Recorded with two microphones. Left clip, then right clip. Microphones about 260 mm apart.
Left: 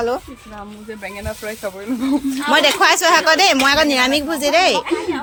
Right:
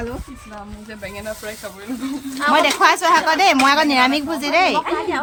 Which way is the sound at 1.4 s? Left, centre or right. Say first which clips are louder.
Left 5 dB; left.